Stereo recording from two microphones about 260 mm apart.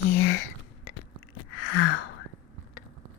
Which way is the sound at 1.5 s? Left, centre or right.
Left.